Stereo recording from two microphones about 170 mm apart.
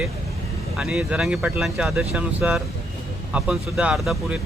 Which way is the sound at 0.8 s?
5° right (ahead or behind).